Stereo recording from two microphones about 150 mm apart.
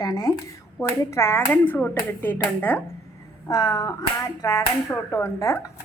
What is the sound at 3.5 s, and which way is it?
Speech, 25° left (ahead or behind).